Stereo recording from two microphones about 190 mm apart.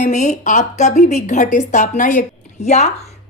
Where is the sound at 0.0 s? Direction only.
40° left (ahead or behind).